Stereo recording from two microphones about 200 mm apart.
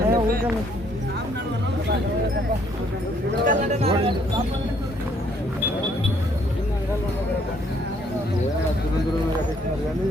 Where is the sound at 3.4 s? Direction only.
35° right (ahead or behind).